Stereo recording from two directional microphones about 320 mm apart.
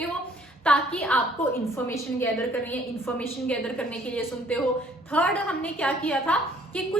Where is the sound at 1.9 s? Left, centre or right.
Centre.